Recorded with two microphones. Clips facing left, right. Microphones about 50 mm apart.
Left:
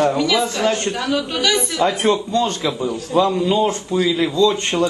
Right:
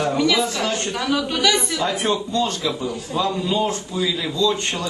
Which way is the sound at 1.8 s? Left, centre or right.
Left.